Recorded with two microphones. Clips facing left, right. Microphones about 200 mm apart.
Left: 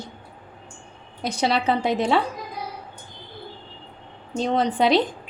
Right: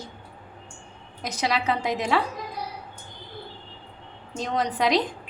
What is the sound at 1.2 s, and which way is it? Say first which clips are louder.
Speech: left 4 dB; 30° left (ahead or behind).